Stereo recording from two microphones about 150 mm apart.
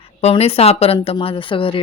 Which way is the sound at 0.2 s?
45° left (ahead or behind).